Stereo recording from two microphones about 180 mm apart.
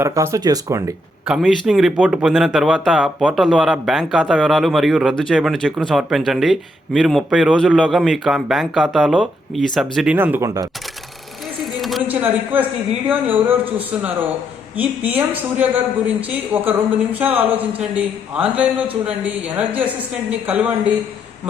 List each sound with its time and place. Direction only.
0.0 s a woman's voice: 15° right (ahead or behind)
1.2 s speech: centre (ahead or behind)
10.2 s a woman's voice: 10° right (ahead or behind)
11.6 s a woman's voice: centre (ahead or behind)